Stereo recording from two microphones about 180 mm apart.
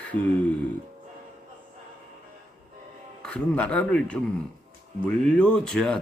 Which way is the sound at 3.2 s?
5° left (ahead or behind).